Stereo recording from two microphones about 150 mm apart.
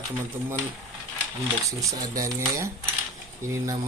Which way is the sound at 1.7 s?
25° right (ahead or behind).